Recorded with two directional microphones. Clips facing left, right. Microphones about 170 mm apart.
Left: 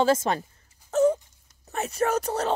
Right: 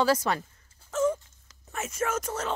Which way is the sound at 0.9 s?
35° left (ahead or behind).